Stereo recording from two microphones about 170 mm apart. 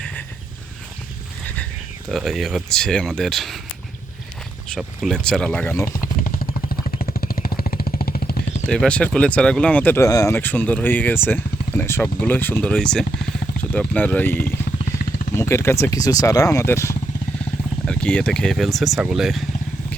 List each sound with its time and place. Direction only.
2.0 s speech: centre (ahead or behind)
4.7 s speech: centre (ahead or behind)
5.9 s a sound: 55° left (ahead or behind)
7.0 s vehicle: 60° left (ahead or behind)
8.6 s speech: 5° left (ahead or behind)
17.8 s speech: 5° left (ahead or behind)